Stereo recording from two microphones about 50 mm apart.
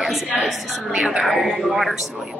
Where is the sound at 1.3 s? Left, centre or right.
Centre.